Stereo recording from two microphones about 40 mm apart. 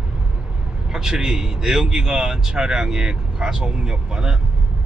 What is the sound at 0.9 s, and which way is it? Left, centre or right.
A man's voice, centre.